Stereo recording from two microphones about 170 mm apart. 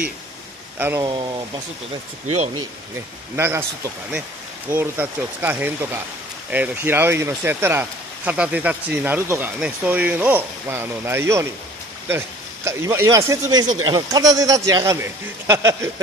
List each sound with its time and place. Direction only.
0.7 s speech: 10° right (ahead or behind)
1.0 s speech: 30° right (ahead or behind)
3.3 s speech: 15° right (ahead or behind)
12.6 s speech: 15° right (ahead or behind)